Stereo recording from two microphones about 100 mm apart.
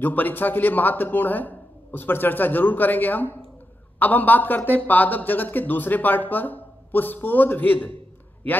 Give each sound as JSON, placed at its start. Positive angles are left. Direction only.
{"t": 0.0, "sound": "a man's voice", "side_deg": 20}